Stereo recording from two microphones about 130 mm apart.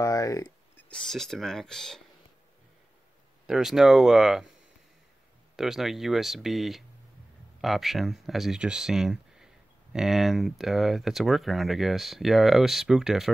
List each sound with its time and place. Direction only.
0.0 s speech: 25° left (ahead or behind)
0.7 s speech: 5° left (ahead or behind)
3.4 s speech: 5° right (ahead or behind)
5.6 s speech: centre (ahead or behind)